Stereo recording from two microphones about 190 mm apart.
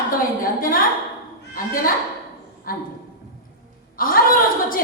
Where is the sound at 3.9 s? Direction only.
50° left (ahead or behind).